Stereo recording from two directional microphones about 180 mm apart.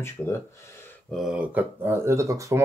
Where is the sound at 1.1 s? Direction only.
Centre (ahead or behind); by 2.5 s 15° right (ahead or behind).